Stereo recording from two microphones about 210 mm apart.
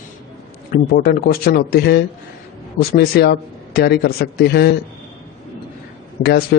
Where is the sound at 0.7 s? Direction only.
45° left (ahead or behind).